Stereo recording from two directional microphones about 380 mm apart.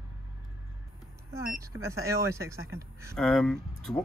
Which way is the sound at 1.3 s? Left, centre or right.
Centre.